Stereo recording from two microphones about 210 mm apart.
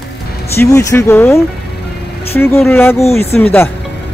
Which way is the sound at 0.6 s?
15° left (ahead or behind).